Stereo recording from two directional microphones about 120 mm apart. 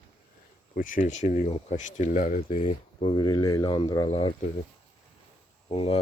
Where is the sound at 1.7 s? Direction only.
90° left.